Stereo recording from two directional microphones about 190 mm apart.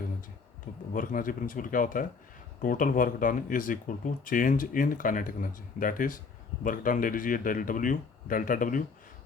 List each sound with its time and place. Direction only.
0.9 s speech: 45° left (ahead or behind)